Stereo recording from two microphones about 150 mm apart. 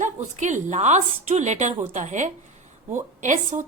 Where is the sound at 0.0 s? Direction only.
55° right (ahead or behind).